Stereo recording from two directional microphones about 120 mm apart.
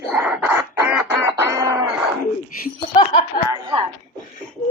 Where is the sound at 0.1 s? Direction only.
10° right (ahead or behind); by 1.9 s 30° right (ahead or behind).